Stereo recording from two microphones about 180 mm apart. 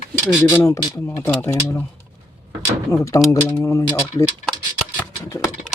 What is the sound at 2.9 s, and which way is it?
Speech, 15° left (ahead or behind).